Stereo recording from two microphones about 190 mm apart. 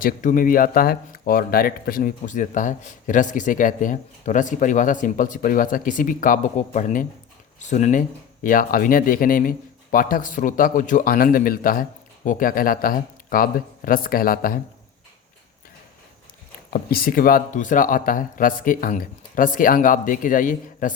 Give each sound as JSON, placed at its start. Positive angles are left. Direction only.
{"t": 0.0, "sound": "speech", "side_deg": 45}
{"t": 16.7, "sound": "speech", "side_deg": 50}